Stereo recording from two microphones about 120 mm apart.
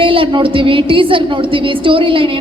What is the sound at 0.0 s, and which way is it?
A woman's voice, 45° right (ahead or behind).